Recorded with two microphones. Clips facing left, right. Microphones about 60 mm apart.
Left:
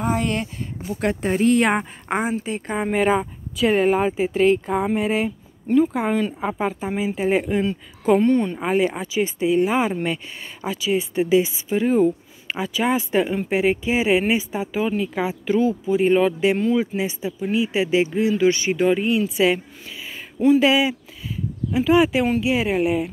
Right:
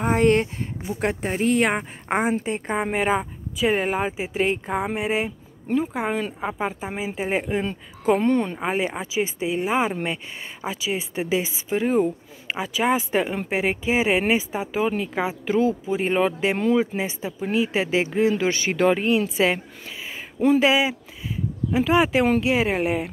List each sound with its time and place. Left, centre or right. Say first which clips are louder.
0.0 s speech: right 4 dB; right
1.0 s speech: left 4 dB; centre
2.0 s a woman's voice: right 3 dB; centre